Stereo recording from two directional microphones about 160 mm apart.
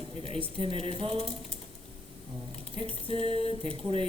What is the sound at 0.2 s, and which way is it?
Speech, 35° right (ahead or behind).